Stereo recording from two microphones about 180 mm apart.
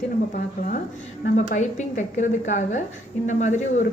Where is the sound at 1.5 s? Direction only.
40° left (ahead or behind).